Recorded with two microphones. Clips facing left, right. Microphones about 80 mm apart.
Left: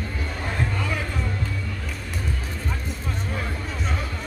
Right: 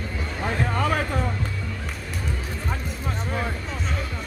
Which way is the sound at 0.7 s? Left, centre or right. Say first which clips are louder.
Right 5 dB; right.